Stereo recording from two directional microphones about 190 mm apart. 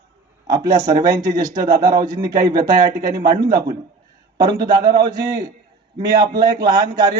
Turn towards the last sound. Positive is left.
turn(degrees=-20)  # may be behind; listen again after turning